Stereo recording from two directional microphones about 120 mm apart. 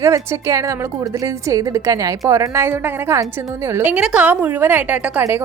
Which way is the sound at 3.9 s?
10° right (ahead or behind).